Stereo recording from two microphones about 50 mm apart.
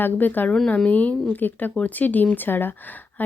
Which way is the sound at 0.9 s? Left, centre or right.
Left.